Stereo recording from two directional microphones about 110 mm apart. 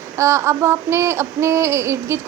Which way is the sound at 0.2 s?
25° right (ahead or behind).